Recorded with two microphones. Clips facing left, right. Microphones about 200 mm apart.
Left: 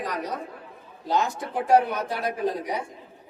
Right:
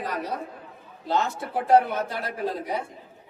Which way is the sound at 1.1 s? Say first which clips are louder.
Left 1 dB; 15° left (ahead or behind).